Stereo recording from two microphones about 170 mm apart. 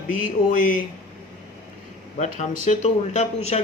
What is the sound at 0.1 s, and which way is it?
Speech, 50° left (ahead or behind).